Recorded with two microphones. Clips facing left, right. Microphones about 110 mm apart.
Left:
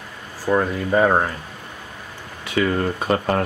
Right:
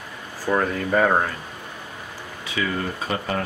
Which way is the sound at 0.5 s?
10° left (ahead or behind).